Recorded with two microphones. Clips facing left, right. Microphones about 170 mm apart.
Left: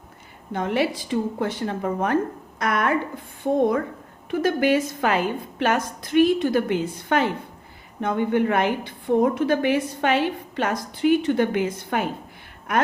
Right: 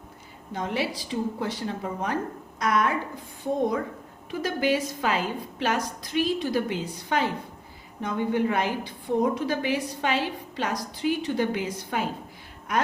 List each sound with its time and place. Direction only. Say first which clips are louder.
0.5 s a woman's voice: left 6 dB; 55° left (ahead or behind)